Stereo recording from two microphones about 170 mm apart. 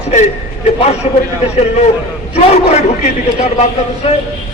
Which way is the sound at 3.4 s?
40° left (ahead or behind).